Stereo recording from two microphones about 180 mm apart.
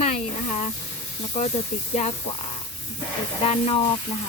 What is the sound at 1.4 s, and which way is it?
Speech, 40° left (ahead or behind).